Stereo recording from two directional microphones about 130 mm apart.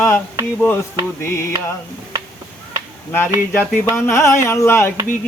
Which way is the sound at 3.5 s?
15° left (ahead or behind).